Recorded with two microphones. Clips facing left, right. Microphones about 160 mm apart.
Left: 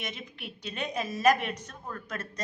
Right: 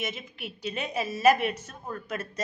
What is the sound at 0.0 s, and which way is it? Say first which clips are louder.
A woman's voice: right 4 dB; 5° right (ahead or behind).